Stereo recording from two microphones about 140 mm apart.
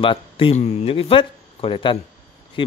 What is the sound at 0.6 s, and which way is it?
A man's voice, 50° left (ahead or behind).